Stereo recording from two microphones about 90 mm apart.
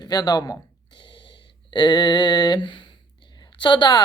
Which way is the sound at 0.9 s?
70° left (ahead or behind).